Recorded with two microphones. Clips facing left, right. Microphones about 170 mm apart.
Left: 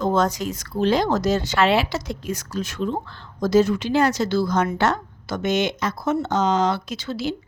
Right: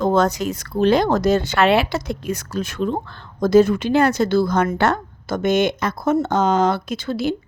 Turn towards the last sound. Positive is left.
turn(degrees=-55)  # may be behind; listen again after turning